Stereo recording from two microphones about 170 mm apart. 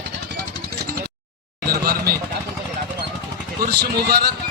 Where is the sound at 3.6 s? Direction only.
70° right (ahead or behind).